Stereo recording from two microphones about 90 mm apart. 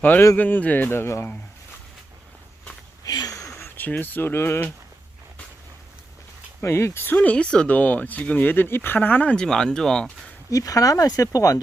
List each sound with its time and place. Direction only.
0.0 s speech: 20° left (ahead or behind)
3.1 s a sound: 45° left (ahead or behind)
3.8 s speech: 20° left (ahead or behind)
6.6 s speech: 30° left (ahead or behind); by 10.3 s 10° left (ahead or behind)
10.5 s speech: 40° left (ahead or behind)